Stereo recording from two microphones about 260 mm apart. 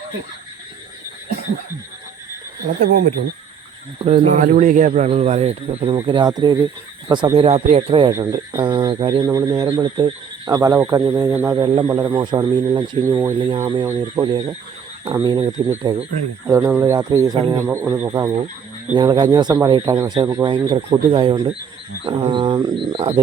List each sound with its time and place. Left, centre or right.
4.0 s speech: right